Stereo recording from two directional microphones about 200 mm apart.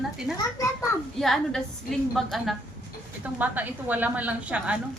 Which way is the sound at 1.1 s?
Centre (ahead or behind).